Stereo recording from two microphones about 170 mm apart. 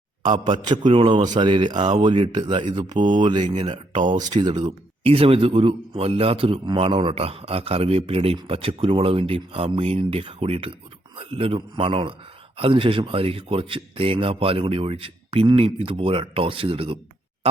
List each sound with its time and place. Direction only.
0.3 s a man's voice: 30° right (ahead or behind)